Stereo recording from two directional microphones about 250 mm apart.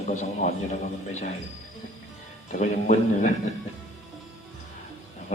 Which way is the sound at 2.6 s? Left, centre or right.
Left.